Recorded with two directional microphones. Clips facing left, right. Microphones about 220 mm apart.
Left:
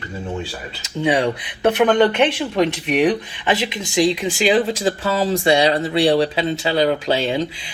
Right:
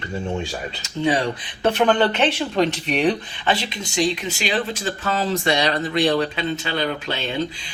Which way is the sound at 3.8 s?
90° left.